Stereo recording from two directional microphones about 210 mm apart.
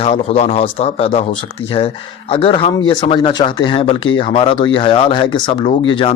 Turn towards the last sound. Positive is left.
turn(degrees=25)  # may be behind; listen again after turning